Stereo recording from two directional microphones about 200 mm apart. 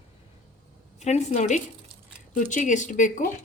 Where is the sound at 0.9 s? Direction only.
35° left (ahead or behind).